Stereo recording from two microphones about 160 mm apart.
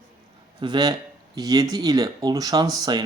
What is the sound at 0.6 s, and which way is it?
Speech, 25° right (ahead or behind).